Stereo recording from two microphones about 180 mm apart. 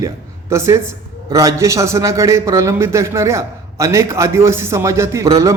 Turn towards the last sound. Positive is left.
turn(degrees=-20)  # may be behind; listen again after turning